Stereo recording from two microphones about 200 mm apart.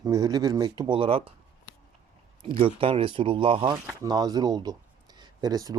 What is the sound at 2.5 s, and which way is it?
Speech, 25° right (ahead or behind).